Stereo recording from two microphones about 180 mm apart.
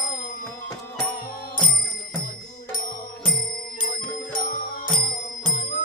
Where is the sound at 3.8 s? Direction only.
50° left (ahead or behind).